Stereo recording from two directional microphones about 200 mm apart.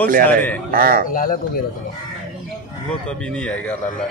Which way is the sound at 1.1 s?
45° left (ahead or behind).